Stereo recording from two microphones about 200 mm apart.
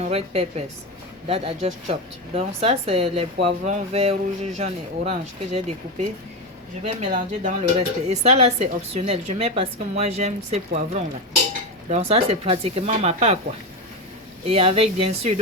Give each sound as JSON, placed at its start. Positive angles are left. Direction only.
{"t": 0.0, "sound": "speech", "side_deg": -30}
{"t": 14.4, "sound": "speech", "side_deg": -30}